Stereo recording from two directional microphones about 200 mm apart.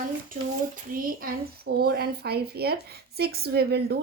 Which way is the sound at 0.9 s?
45° right (ahead or behind).